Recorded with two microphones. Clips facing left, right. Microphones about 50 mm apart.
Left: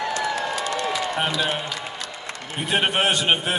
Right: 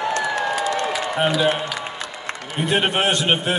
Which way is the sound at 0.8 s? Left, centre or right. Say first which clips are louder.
Right 1 dB; right.